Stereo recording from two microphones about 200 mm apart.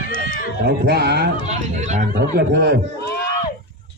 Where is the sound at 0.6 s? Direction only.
55° right (ahead or behind).